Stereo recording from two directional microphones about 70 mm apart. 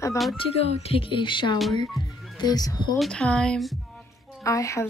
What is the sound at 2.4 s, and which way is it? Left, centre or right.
Speech, left.